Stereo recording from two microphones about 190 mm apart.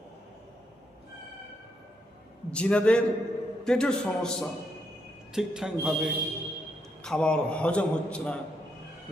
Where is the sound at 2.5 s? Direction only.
5° left (ahead or behind).